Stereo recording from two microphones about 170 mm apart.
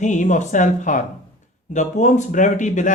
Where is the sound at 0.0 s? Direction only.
45° left (ahead or behind).